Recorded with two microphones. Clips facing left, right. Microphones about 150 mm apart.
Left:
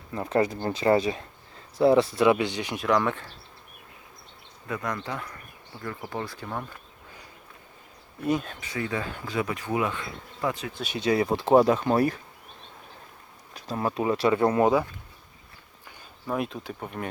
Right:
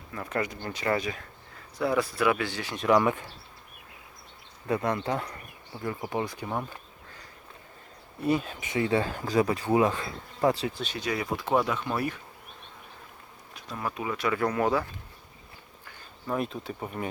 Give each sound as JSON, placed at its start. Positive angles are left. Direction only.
{"t": 0.1, "sound": "speech", "side_deg": 30}
{"t": 2.8, "sound": "speech", "side_deg": -10}
{"t": 4.7, "sound": "speech", "side_deg": -30}
{"t": 5.8, "sound": "speech", "side_deg": -15}
{"t": 8.2, "sound": "speech", "side_deg": -5}
{"t": 8.6, "sound": "speech", "side_deg": -25}
{"t": 10.9, "sound": "speech", "side_deg": 25}
{"t": 13.6, "sound": "speech", "side_deg": 35}
{"t": 16.2, "sound": "speech", "side_deg": 0}